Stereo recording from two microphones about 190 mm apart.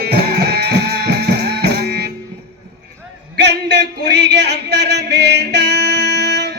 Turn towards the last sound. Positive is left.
turn(degrees=-60)  # may be behind; listen again after turning